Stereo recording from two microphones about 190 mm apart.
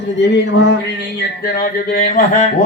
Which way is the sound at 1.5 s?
45° left (ahead or behind).